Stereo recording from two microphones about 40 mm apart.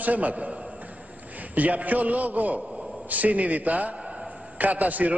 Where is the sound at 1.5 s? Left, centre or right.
Right.